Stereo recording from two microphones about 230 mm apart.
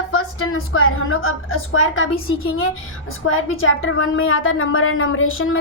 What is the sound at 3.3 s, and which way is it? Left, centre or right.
A woman's voice, left.